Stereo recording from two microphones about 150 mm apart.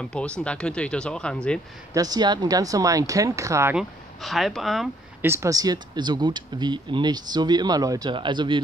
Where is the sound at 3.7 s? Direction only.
Centre (ahead or behind).